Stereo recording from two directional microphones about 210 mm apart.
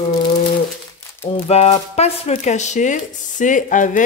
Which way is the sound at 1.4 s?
30° left (ahead or behind).